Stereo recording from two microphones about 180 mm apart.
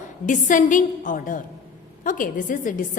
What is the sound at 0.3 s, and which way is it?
A woman's voice, 45° left (ahead or behind).